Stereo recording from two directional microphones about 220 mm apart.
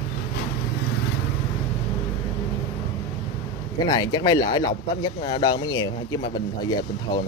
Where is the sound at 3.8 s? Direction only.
20° left (ahead or behind).